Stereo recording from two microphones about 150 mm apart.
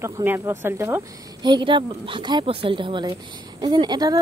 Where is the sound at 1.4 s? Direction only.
30° right (ahead or behind).